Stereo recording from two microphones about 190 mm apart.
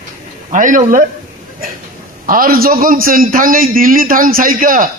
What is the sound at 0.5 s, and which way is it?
Speech, 45° right (ahead or behind).